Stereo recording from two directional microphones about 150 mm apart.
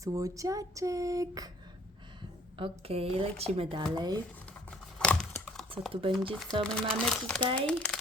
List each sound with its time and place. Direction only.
0.0 s a sound: 20° right (ahead or behind)
2.6 s speech: 35° right (ahead or behind)
3.9 s a sound: 25° right (ahead or behind)
4.9 s crumpling: 5° left (ahead or behind)
5.9 s speech: 35° right (ahead or behind)
6.3 s speech: 5° left (ahead or behind)
7.4 s speech: 35° right (ahead or behind)
7.7 s speech: 5° left (ahead or behind)